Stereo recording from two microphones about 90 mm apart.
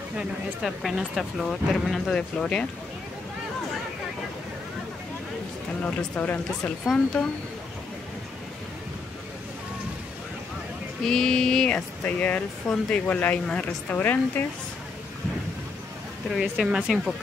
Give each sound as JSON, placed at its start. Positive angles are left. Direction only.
{"t": 0.2, "sound": "speech", "side_deg": -5}
{"t": 5.8, "sound": "speech", "side_deg": 20}
{"t": 6.6, "sound": "speech", "side_deg": 5}
{"t": 11.1, "sound": "speech", "side_deg": 5}
{"t": 16.3, "sound": "speech", "side_deg": -10}